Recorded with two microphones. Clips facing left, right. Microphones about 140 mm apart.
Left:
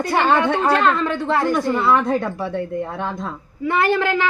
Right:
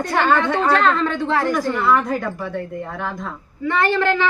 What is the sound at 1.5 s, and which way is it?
A woman's voice, 30° left (ahead or behind).